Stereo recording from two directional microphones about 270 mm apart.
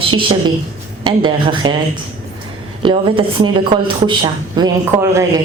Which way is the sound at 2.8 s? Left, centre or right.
Centre.